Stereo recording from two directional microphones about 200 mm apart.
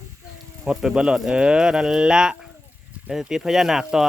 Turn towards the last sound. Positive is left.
turn(degrees=0)  # may be behind; listen again after turning